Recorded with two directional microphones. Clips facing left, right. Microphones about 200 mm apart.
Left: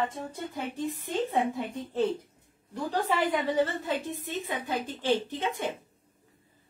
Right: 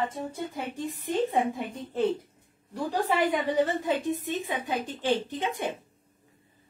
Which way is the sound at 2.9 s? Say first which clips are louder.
Right 2 dB; 15° right (ahead or behind).